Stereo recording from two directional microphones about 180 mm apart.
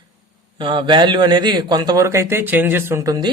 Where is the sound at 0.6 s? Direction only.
25° right (ahead or behind).